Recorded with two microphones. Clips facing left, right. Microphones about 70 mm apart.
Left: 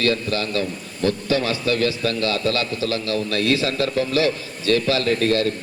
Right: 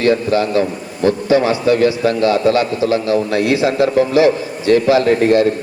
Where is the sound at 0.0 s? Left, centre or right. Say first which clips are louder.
Right 8 dB; right.